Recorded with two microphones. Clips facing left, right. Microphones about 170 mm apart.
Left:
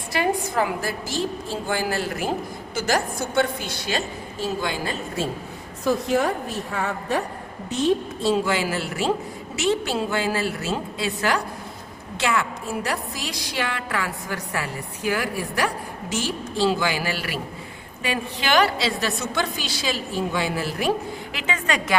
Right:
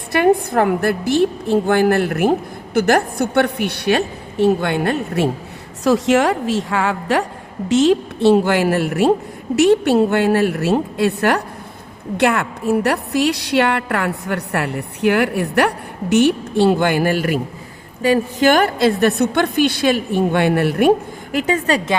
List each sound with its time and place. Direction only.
0.1 s a woman's voice: 60° right (ahead or behind)
5.8 s a woman's voice: 90° right; by 20.9 s 60° right (ahead or behind)
21.3 s a woman's voice: 40° right (ahead or behind)